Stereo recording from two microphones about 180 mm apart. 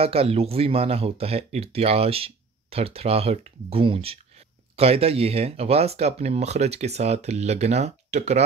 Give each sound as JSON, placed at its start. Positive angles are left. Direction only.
{"t": 0.0, "sound": "speech", "side_deg": -30}